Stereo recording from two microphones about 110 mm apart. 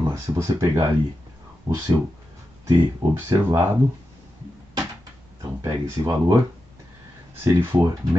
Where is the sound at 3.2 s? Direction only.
25° right (ahead or behind).